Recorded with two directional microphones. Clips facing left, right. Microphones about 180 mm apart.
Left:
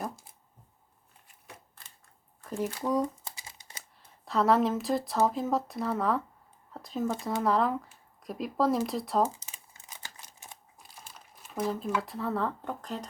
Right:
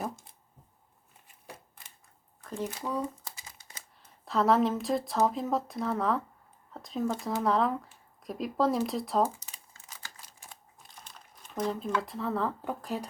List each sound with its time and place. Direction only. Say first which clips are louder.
2.8 s speech: left 5 dB; 15° left (ahead or behind)
4.3 s speech: even; centre (ahead or behind)
9.7 s crumpling: left 1 dB; 20° left (ahead or behind)
10.8 s speech: left 1 dB; 5° left (ahead or behind)